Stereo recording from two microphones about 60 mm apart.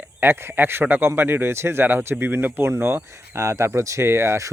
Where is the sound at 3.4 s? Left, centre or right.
Right.